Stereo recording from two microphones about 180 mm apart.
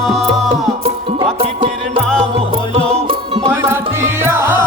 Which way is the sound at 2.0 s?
5° left (ahead or behind).